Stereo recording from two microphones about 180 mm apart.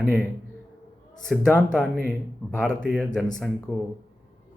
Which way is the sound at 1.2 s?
5° left (ahead or behind).